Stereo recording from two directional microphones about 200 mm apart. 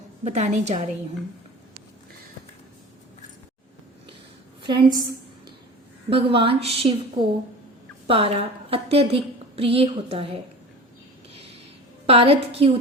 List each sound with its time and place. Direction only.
0.3 s a woman's voice: 35° right (ahead or behind)
4.6 s a woman's voice: 25° right (ahead or behind)
6.3 s a woman's voice: 25° right (ahead or behind)
12.0 s a woman's voice: 30° right (ahead or behind)